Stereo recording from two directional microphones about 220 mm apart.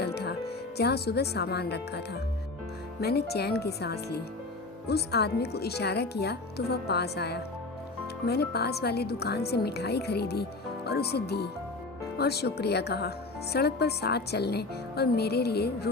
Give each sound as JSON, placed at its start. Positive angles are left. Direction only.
{"t": 0.0, "sound": "speech", "side_deg": 50}